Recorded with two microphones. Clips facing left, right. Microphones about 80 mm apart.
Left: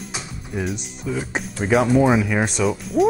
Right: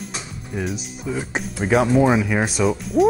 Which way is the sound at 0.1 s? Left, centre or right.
Centre.